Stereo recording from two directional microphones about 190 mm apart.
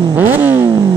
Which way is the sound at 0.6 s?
20° right (ahead or behind).